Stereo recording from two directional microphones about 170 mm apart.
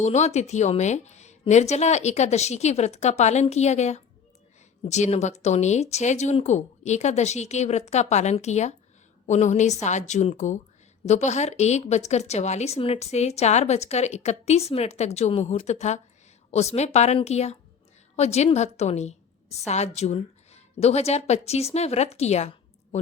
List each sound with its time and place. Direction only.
0.0 s a woman's voice: 40° left (ahead or behind)